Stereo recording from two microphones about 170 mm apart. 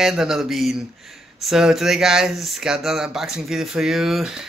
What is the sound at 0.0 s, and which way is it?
Speech, 5° right (ahead or behind).